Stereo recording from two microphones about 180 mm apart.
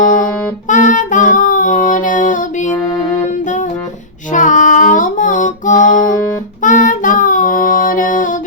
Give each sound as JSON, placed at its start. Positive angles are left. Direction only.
{"t": 0.7, "sound": "child singing", "side_deg": 45}
{"t": 3.2, "sound": "music", "side_deg": 45}
{"t": 6.6, "sound": "child singing", "side_deg": 45}